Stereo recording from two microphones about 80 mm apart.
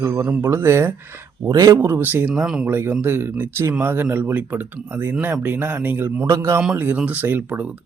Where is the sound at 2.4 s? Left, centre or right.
Centre.